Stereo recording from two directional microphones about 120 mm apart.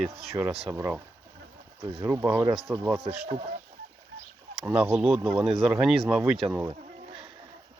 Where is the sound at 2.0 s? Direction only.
20° right (ahead or behind).